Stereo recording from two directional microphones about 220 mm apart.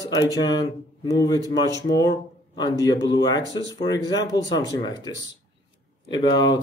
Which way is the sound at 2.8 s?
20° left (ahead or behind).